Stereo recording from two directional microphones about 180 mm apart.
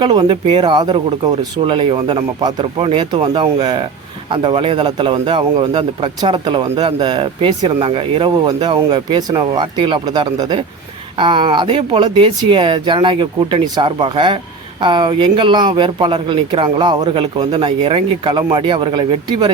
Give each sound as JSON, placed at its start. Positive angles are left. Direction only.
{"t": 0.0, "sound": "a man's voice", "side_deg": -25}